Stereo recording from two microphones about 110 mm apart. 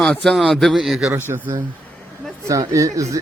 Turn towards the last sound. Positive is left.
turn(degrees=-30)  # may be behind; listen again after turning